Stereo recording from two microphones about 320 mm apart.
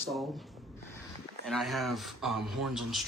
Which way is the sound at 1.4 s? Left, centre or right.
Centre.